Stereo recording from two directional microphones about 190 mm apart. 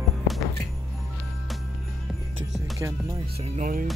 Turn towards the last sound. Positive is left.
turn(degrees=-50)  # may be behind; listen again after turning